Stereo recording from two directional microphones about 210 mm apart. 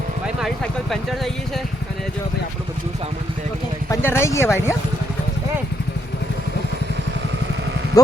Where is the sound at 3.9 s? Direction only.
10° left (ahead or behind).